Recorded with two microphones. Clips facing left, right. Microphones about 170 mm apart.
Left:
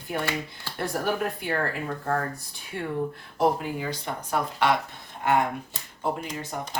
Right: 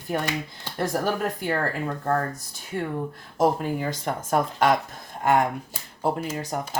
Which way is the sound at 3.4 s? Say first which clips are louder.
Right 2 dB; 45° right (ahead or behind).